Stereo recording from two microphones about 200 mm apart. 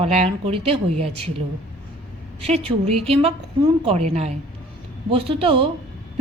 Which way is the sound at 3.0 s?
30° right (ahead or behind).